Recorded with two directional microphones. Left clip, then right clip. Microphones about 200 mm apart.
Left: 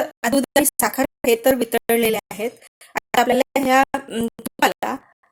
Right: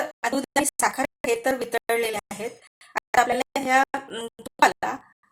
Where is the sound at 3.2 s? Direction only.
40° left (ahead or behind).